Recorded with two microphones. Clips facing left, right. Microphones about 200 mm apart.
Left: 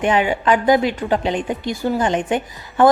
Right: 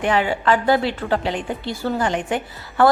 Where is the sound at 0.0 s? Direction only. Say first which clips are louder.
Left 2 dB; 20° left (ahead or behind).